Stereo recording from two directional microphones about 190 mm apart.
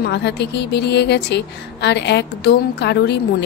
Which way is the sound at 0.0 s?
65° left (ahead or behind).